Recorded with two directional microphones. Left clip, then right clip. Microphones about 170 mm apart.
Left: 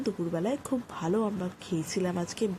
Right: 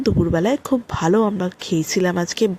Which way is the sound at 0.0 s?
35° right (ahead or behind).